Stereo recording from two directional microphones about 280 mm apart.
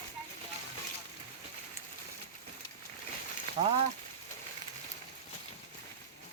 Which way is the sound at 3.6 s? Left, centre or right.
Centre.